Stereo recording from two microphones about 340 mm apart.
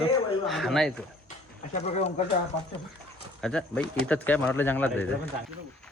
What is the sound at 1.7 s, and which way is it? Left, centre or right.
Speech, centre.